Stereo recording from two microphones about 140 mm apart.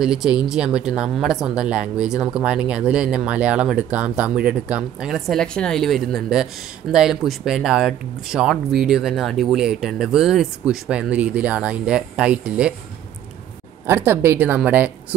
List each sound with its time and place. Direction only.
0.0 s speech: 5° right (ahead or behind)
13.8 s a woman's voice: 15° right (ahead or behind)